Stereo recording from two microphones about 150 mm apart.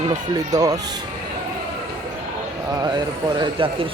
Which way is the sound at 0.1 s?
25° right (ahead or behind).